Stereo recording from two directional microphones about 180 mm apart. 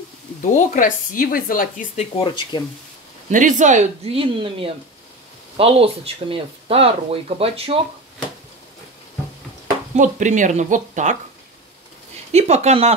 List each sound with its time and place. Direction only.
0.4 s speech: 45° left (ahead or behind)
2.1 s speech: 25° left (ahead or behind)
3.3 s speech: 45° right (ahead or behind)
9.9 s speech: 45° right (ahead or behind)
12.3 s speech: 40° right (ahead or behind)